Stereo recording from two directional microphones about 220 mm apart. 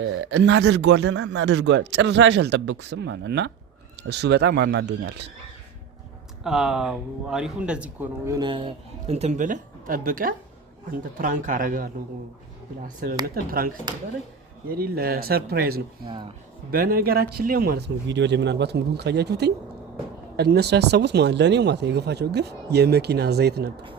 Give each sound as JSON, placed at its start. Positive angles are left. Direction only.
{"t": 0.0, "sound": "speech", "side_deg": -60}
{"t": 6.4, "sound": "speech", "side_deg": 0}
{"t": 14.7, "sound": "speech", "side_deg": -45}